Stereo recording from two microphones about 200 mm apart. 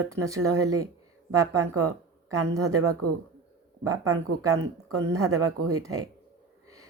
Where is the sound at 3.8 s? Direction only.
15° right (ahead or behind).